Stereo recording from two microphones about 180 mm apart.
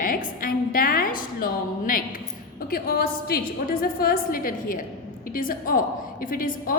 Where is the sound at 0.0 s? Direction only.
50° left (ahead or behind).